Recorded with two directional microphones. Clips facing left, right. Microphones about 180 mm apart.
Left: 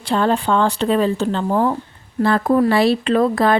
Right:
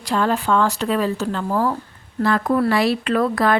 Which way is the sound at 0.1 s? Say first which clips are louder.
Left 2 dB; 30° left (ahead or behind).